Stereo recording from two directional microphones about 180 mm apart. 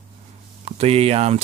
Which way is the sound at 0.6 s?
35° right (ahead or behind).